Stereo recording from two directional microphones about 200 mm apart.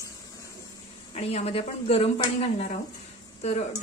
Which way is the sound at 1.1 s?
30° left (ahead or behind).